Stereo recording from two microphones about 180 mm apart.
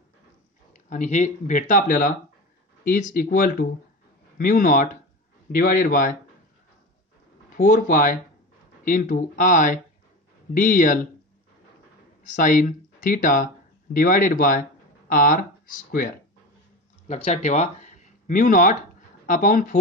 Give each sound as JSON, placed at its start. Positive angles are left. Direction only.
{"t": 0.8, "sound": "speech", "side_deg": 45}
{"t": 7.5, "sound": "speech", "side_deg": 45}
{"t": 12.2, "sound": "speech", "side_deg": 45}
{"t": 17.1, "sound": "speech", "side_deg": 40}